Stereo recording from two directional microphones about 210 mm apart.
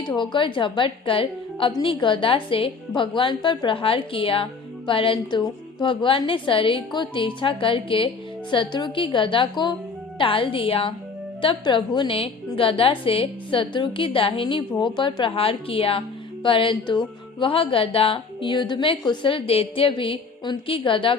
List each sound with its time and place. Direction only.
0.2 s a woman's voice: 20° left (ahead or behind)